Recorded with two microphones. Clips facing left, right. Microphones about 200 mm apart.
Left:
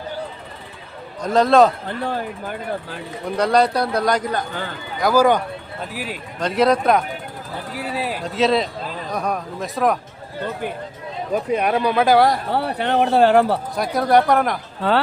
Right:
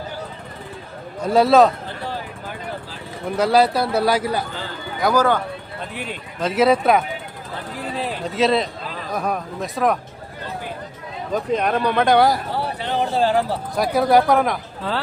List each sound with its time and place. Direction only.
1.2 s a man's voice: 10° right (ahead or behind)
2.0 s vehicle: 55° left (ahead or behind)
3.3 s a man's voice: 5° right (ahead or behind)
7.8 s a man's voice: 10° left (ahead or behind)
11.3 s speech: 10° left (ahead or behind)
12.5 s speech: 60° left (ahead or behind)
13.7 s a man's voice: centre (ahead or behind)
14.8 s speech: 65° left (ahead or behind)